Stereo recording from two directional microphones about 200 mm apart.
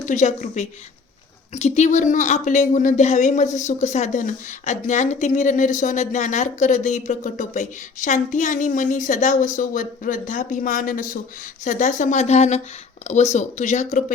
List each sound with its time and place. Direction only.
0.0 s a woman's voice: 40° left (ahead or behind)